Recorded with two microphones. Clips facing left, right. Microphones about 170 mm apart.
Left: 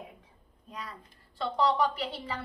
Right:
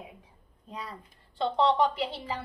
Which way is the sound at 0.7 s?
30° right (ahead or behind).